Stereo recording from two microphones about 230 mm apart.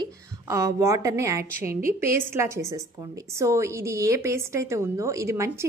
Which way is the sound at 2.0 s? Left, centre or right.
Centre.